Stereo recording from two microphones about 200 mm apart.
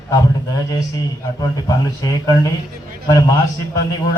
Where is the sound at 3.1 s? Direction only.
20° left (ahead or behind).